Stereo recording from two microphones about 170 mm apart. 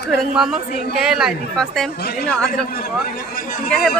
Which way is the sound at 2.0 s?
65° left (ahead or behind).